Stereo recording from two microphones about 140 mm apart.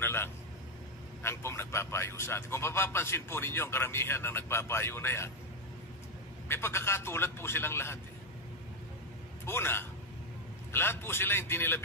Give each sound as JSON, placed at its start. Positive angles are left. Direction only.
{"t": 0.0, "sound": "a man's voice", "side_deg": 15}
{"t": 6.5, "sound": "a man's voice", "side_deg": 15}
{"t": 9.5, "sound": "a man's voice", "side_deg": 15}